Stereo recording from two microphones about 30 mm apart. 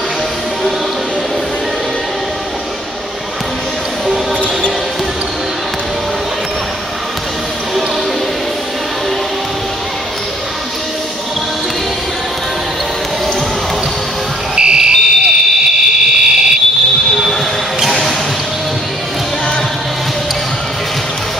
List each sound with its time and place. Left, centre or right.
14.6 s fire alarm: right